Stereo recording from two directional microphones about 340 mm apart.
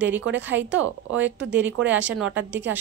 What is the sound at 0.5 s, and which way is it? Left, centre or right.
Speech, right.